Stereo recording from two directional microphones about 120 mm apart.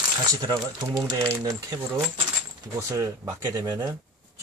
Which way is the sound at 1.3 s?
25° right (ahead or behind).